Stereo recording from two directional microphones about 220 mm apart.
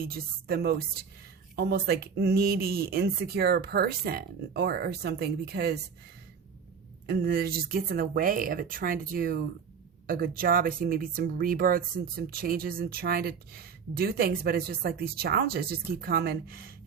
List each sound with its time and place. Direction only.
0.0 s speech: 45° right (ahead or behind)
7.1 s speech: 45° right (ahead or behind)